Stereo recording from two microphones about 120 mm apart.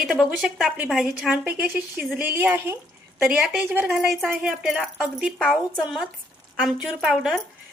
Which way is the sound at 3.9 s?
5° right (ahead or behind).